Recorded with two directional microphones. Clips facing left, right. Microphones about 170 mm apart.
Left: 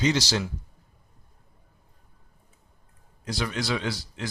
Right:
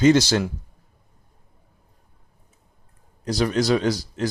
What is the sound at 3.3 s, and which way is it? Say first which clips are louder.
Speech: right 9 dB; 40° right (ahead or behind).